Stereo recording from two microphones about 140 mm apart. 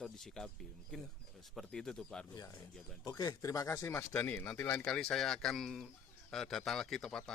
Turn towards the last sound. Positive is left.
turn(degrees=5)  # may be behind; listen again after turning